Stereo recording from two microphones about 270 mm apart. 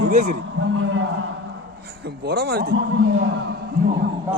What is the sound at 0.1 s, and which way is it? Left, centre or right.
Speech, right.